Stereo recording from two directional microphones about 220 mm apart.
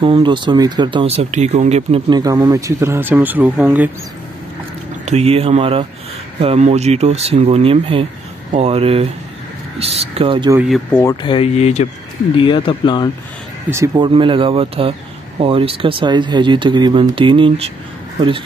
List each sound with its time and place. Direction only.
0.0 s speech: 20° right (ahead or behind)
5.0 s speech: 30° right (ahead or behind)
10.5 s speech: 5° right (ahead or behind)
11.2 s speech: 25° left (ahead or behind)
13.7 s speech: 15° right (ahead or behind)